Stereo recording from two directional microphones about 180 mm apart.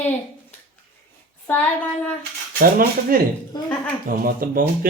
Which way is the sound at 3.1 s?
55° right (ahead or behind).